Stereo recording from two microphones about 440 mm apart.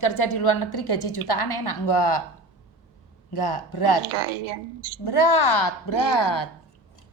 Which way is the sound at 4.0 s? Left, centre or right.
Right.